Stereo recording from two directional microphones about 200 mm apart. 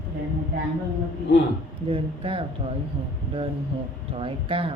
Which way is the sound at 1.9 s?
25° right (ahead or behind).